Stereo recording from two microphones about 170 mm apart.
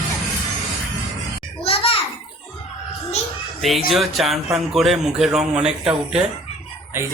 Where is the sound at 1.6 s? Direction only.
35° left (ahead or behind).